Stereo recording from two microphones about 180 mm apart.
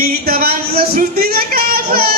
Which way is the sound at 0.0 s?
55° right (ahead or behind).